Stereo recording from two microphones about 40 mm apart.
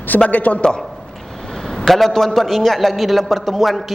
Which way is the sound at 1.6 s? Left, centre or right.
Centre.